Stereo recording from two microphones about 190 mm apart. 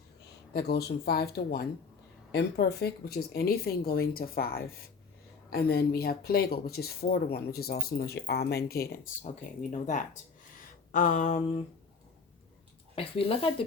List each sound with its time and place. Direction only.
0.5 s speech: 60° left (ahead or behind)
9.2 s speech: 40° left (ahead or behind)
13.0 s speech: 30° left (ahead or behind)